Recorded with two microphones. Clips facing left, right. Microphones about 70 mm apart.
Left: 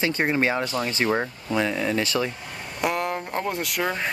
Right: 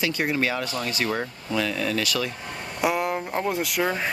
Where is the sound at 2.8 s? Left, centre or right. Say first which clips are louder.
Right 1 dB; centre.